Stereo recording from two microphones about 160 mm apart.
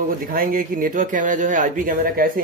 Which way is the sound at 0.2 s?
65° right (ahead or behind).